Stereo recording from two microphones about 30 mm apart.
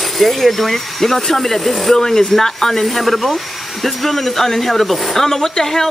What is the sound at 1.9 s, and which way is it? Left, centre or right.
Speech, centre.